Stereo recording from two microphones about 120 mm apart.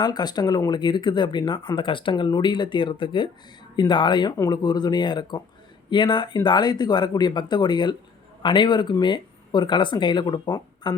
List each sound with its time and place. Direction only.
0.0 s speech: 35° left (ahead or behind)